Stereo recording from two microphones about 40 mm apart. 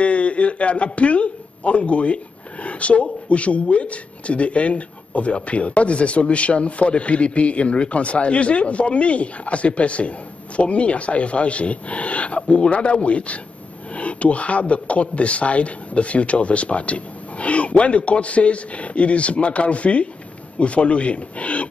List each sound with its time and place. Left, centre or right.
0.0 s speech: left